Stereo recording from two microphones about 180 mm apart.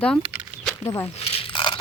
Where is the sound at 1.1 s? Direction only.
35° left (ahead or behind).